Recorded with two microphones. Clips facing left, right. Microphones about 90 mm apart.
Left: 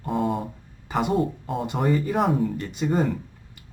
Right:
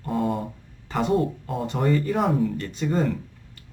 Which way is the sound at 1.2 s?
Centre (ahead or behind).